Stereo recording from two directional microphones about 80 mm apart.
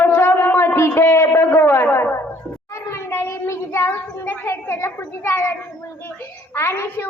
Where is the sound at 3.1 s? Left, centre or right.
Left.